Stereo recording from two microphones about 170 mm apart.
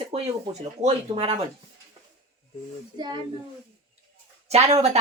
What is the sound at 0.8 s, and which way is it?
Speech, 35° right (ahead or behind).